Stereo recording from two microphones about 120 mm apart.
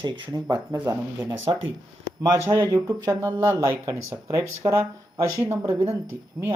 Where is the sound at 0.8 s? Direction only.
20° right (ahead or behind).